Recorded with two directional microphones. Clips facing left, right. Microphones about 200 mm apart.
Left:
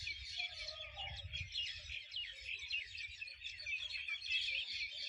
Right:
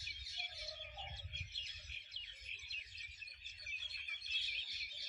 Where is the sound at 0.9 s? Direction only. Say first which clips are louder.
Right 1 dB; 55° right (ahead or behind).